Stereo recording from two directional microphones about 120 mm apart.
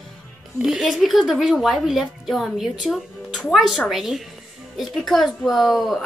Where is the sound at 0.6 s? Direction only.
Centre (ahead or behind).